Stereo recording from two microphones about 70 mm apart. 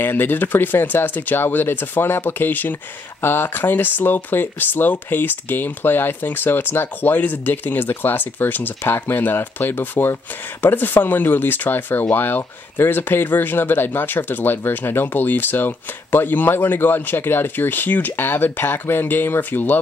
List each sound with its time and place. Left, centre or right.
0.0 s speech: left